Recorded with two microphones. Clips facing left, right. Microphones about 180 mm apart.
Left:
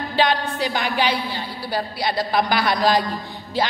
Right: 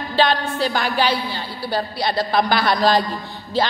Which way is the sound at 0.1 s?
15° left (ahead or behind).